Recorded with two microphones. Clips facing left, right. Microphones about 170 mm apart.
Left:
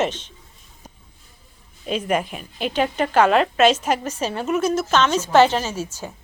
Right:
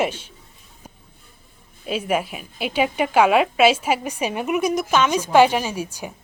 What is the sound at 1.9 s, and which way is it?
A woman's voice, 5° right (ahead or behind).